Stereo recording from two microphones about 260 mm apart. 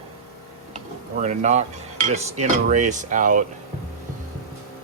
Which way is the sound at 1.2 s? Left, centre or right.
Right.